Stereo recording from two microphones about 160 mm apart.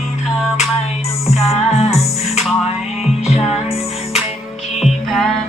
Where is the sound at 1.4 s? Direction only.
40° left (ahead or behind).